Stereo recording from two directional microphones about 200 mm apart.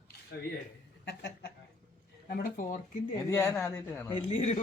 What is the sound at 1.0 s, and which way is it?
Speech, 60° left (ahead or behind).